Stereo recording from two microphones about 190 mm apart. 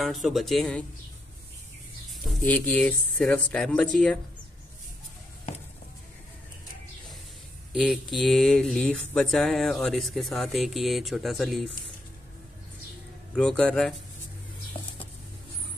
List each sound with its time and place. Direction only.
0.0 s speech: centre (ahead or behind)
2.4 s speech: 5° left (ahead or behind)
7.8 s speech: centre (ahead or behind)
13.4 s speech: 5° left (ahead or behind)
14.7 s a sound: 25° left (ahead or behind)